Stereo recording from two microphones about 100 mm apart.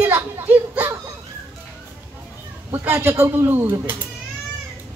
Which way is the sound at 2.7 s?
25° right (ahead or behind).